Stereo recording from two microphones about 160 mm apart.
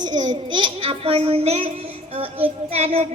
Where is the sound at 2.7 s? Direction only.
40° right (ahead or behind).